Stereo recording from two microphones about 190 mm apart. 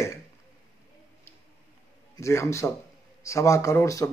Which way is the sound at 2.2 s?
15° left (ahead or behind).